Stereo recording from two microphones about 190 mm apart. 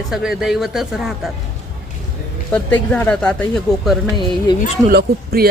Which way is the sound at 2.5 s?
10° left (ahead or behind).